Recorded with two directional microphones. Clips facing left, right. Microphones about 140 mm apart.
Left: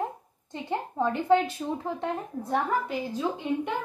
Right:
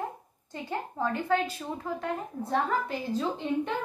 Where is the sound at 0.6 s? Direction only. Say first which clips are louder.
Left 3 dB; 20° left (ahead or behind).